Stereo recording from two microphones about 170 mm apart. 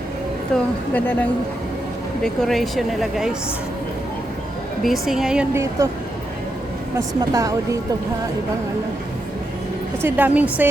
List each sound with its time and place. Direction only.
0.5 s a woman's voice: 10° left (ahead or behind)
4.8 s speech: centre (ahead or behind)
5.8 s a woman's voice: 20° right (ahead or behind)
10.0 s a woman's voice: 10° right (ahead or behind)